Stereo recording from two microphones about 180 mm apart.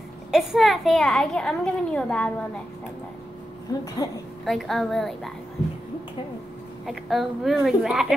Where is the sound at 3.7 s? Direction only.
20° left (ahead or behind).